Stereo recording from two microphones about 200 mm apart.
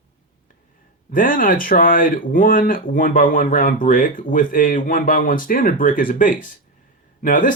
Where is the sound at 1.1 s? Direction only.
45° left (ahead or behind).